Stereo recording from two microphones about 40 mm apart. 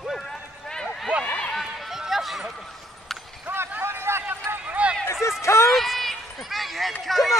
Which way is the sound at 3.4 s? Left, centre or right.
Right.